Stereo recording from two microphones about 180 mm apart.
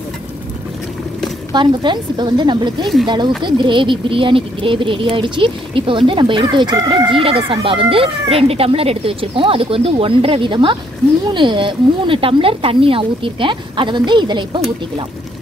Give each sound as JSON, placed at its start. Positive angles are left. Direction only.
{"t": 1.5, "sound": "speech", "side_deg": -25}
{"t": 2.8, "sound": "speech", "side_deg": 0}
{"t": 3.4, "sound": "speech", "side_deg": -25}